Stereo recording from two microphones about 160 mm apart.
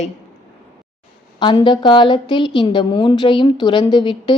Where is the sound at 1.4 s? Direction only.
30° left (ahead or behind).